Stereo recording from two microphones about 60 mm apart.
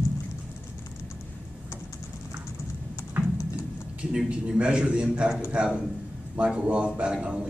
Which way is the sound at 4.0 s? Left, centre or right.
Centre.